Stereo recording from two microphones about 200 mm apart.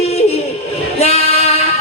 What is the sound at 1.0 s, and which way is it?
Female singing, 30° left (ahead or behind).